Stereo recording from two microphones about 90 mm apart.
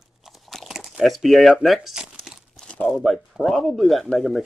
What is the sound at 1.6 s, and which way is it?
Speech, centre (ahead or behind).